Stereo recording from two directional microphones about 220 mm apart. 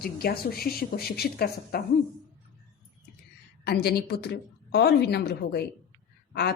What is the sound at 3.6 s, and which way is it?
A woman's voice, 45° left (ahead or behind).